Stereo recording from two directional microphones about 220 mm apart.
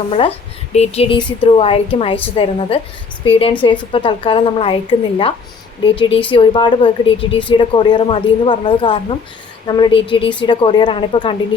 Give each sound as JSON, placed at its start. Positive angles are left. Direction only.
{"t": 0.1, "sound": "a woman's voice", "side_deg": 25}